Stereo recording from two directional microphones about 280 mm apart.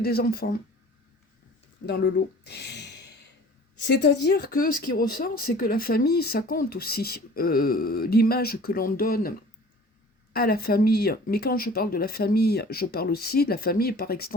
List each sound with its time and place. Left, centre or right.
0.0 s speech: left
1.9 s speech: left
10.3 s speech: left